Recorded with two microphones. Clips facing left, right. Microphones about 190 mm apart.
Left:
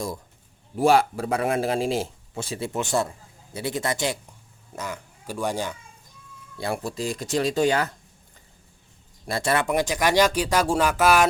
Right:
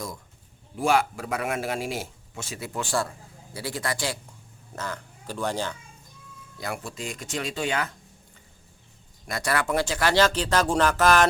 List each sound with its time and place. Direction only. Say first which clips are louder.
0.8 s a man's voice: left 4 dB; 35° left (ahead or behind); by 5.7 s 15° left (ahead or behind)
6.6 s speech: left 6 dB; 35° left (ahead or behind)
9.2 s speech: left 3 dB; 25° left (ahead or behind); by 11.3 s 10° left (ahead or behind)